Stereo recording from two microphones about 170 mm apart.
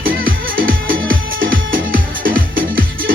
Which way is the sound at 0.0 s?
55° right (ahead or behind).